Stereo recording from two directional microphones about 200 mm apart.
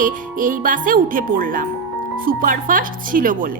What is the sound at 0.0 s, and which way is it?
Speech, 45° right (ahead or behind).